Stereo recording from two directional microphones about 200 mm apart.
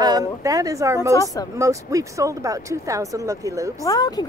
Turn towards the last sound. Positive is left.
turn(degrees=20)  # may be behind; listen again after turning